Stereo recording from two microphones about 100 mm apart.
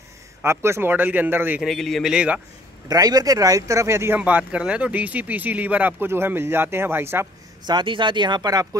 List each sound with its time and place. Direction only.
0.4 s a man's voice: 25° right (ahead or behind)
1.6 s a man's voice: centre (ahead or behind)
2.1 s speech: 10° right (ahead or behind)
2.9 s speech: 40° right (ahead or behind)
4.2 s speech: 15° right (ahead or behind)
7.6 s speech: 50° right (ahead or behind)